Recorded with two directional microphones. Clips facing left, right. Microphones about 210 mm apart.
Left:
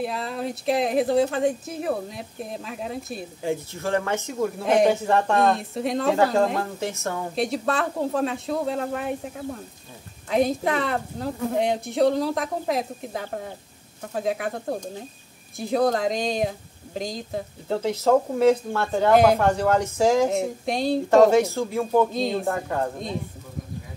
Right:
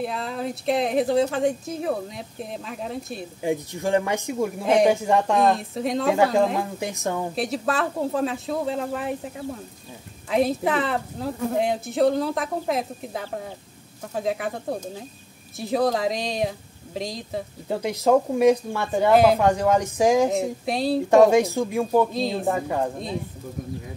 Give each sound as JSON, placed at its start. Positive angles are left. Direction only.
{"t": 0.0, "sound": "speech", "side_deg": 0}
{"t": 3.4, "sound": "speech", "side_deg": -15}
{"t": 4.6, "sound": "speech", "side_deg": 0}
{"t": 4.9, "sound": "speech", "side_deg": -15}
{"t": 5.4, "sound": "speech", "side_deg": 0}
{"t": 6.8, "sound": "speech", "side_deg": -15}
{"t": 7.3, "sound": "speech", "side_deg": 0}
{"t": 17.6, "sound": "speech", "side_deg": -15}
{"t": 19.1, "sound": "speech", "side_deg": 0}
{"t": 19.4, "sound": "speech", "side_deg": -15}
{"t": 20.2, "sound": "speech", "side_deg": 0}
{"t": 21.1, "sound": "speech", "side_deg": -15}
{"t": 22.1, "sound": "speech", "side_deg": 0}
{"t": 22.5, "sound": "speech", "side_deg": -10}